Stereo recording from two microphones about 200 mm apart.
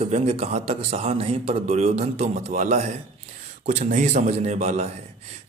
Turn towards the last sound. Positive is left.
turn(degrees=-35)  # may be behind; listen again after turning